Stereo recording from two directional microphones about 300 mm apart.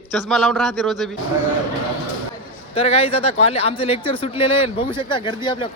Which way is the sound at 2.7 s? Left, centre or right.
Centre.